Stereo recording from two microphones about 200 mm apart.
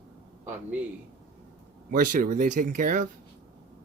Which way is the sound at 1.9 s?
45° right (ahead or behind).